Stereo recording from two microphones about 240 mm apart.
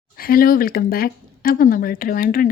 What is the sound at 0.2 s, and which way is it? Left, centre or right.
Speech, left.